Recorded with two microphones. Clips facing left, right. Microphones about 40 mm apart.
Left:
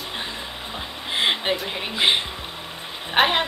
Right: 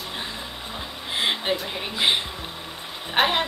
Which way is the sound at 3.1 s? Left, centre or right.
Centre.